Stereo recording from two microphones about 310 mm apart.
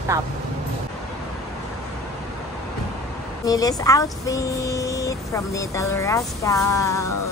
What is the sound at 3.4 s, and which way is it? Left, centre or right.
Speech, centre.